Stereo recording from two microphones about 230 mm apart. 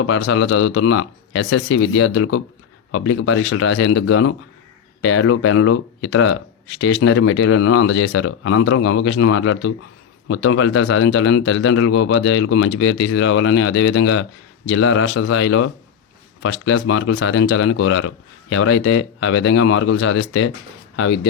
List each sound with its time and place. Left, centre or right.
0.0 s speech: left